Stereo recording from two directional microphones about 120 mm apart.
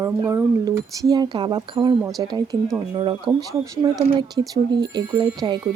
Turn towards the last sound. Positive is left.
turn(degrees=-35)  # may be behind; listen again after turning